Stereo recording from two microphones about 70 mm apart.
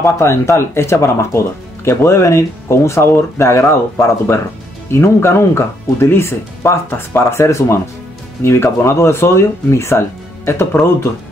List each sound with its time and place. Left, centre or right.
0.0 s speech: left